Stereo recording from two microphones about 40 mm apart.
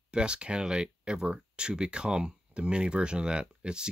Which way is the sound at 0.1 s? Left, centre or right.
Right.